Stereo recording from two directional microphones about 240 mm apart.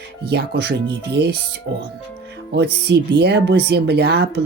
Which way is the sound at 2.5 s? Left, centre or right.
Right.